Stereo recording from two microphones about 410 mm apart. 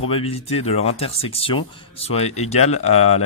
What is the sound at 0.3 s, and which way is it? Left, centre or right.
Speech, centre.